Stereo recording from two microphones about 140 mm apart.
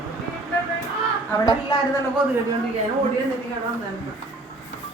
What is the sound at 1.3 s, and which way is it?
Speech, 30° left (ahead or behind).